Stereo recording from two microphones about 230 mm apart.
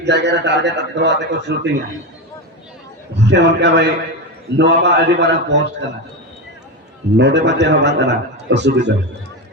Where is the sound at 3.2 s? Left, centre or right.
Right.